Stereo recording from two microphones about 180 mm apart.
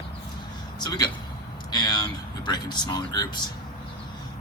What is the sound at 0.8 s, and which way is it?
Speech, 20° left (ahead or behind).